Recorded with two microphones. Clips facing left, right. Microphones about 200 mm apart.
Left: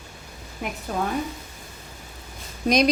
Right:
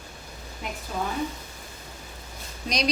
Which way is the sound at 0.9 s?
55° left (ahead or behind).